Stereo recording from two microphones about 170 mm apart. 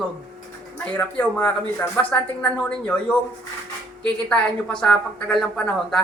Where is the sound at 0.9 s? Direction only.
10° left (ahead or behind).